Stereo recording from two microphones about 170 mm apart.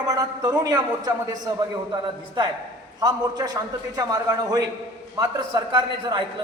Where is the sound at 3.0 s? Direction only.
20° right (ahead or behind).